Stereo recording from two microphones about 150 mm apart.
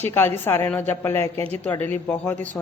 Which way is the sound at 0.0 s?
15° left (ahead or behind).